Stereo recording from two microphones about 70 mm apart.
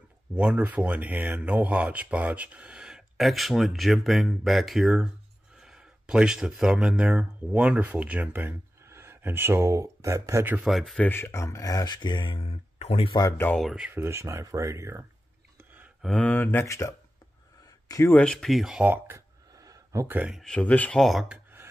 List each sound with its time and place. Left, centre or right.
0.4 s speech: centre
3.2 s speech: centre; by 10.4 s right
10.7 s speech: centre
11.0 s speech: left
13.1 s speech: left
13.9 s speech: right
16.0 s speech: centre
16.3 s speech: left
16.6 s speech: left
18.1 s speech: centre
18.8 s speech: right
19.6 s a sound: right
20.4 s speech: centre
21.0 s speech: centre